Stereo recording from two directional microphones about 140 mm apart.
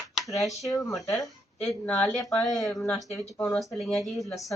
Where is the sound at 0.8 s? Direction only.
Centre (ahead or behind).